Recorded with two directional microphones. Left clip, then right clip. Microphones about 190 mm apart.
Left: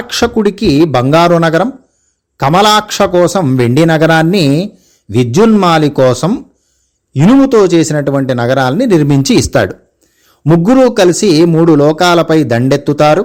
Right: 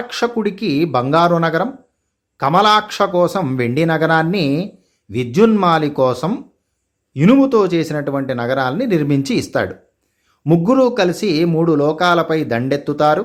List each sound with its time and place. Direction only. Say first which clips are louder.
0.1 s a man's voice: left 8 dB; 40° left (ahead or behind)